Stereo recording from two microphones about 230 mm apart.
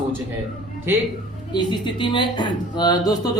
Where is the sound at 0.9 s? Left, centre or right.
Centre.